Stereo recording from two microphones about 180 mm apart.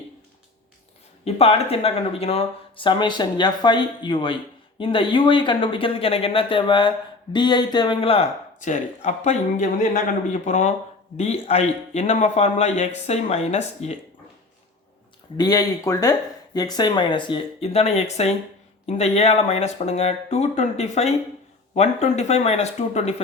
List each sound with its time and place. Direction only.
1.2 s speech: 35° left (ahead or behind)
15.4 s speech: 20° left (ahead or behind)